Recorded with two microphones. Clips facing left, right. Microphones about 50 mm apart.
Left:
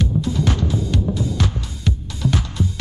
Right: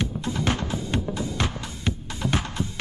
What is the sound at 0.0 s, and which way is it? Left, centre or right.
Music, right.